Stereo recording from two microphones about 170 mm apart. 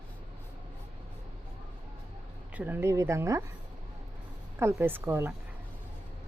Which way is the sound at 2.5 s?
10° right (ahead or behind).